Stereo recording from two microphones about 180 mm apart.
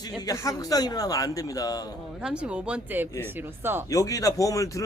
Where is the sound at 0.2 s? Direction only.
20° left (ahead or behind).